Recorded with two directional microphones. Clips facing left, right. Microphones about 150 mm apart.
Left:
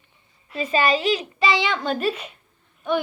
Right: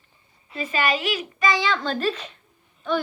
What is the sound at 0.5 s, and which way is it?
A child's voice, 25° left (ahead or behind).